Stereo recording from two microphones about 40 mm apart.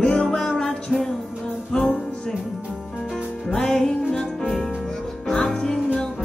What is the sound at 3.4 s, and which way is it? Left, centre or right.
Music, centre.